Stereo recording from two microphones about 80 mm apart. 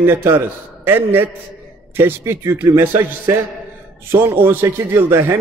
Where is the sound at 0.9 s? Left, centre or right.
Right.